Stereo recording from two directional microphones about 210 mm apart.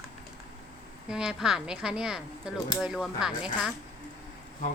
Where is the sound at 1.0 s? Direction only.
5° right (ahead or behind).